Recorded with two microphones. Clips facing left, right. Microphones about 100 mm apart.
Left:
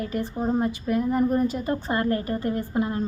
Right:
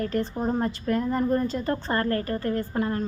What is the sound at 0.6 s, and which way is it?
Speech, 10° left (ahead or behind).